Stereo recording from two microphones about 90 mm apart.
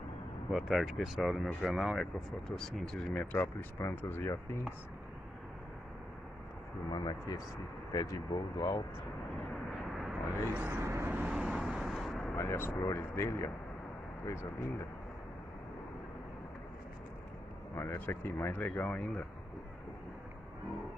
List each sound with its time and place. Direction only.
0.5 s speech: 5° right (ahead or behind)
3.1 s speech: 15° left (ahead or behind)
3.3 s speech: 30° left (ahead or behind)
6.9 s speech: 45° left (ahead or behind)
10.5 s speech: 15° right (ahead or behind)
10.8 s vehicle: 30° right (ahead or behind)
11.2 s vehicle: 10° right (ahead or behind)
12.5 s speech: 25° left (ahead or behind)
17.7 s speech: 25° left (ahead or behind)